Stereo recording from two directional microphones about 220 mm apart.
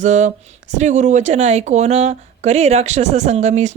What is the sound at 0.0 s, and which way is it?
Speech, 35° right (ahead or behind).